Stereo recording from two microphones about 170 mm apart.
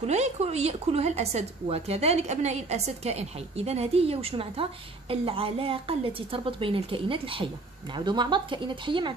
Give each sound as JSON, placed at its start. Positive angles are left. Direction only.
{"t": 0.0, "sound": "speech", "side_deg": -40}